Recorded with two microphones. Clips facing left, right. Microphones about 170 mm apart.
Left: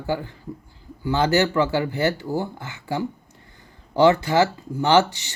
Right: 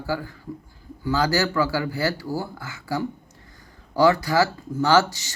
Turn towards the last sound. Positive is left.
turn(degrees=20)  # may be behind; listen again after turning